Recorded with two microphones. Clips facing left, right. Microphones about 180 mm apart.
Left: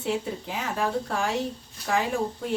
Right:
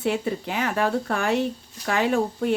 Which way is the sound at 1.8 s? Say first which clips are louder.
Right 4 dB; 75° right (ahead or behind).